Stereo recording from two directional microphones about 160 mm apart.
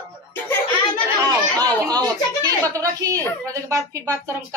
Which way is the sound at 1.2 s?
25° right (ahead or behind).